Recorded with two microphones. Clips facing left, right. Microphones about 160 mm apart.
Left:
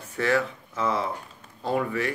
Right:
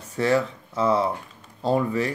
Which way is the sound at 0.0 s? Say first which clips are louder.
Right 3 dB; 35° right (ahead or behind).